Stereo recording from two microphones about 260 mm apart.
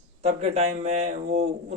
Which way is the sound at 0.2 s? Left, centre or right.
Right.